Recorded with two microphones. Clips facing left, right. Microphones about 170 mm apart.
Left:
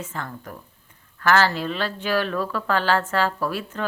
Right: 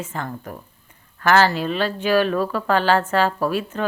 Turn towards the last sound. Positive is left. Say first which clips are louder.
# right 5 dB
turn(degrees=-15)  # may be behind; listen again after turning